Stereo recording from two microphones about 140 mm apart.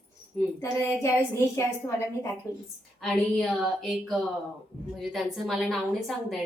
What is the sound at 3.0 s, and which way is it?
A woman's voice, 5° left (ahead or behind).